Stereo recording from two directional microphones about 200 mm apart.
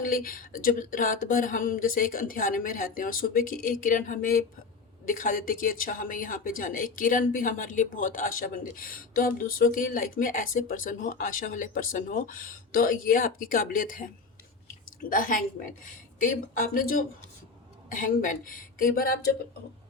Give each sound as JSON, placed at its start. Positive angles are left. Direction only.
{"t": 0.0, "sound": "speech", "side_deg": 45}
{"t": 15.1, "sound": "speech", "side_deg": 45}